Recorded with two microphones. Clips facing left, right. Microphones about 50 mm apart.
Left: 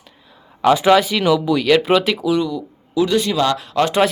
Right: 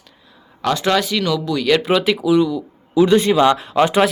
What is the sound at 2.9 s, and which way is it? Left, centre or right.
Speech, right.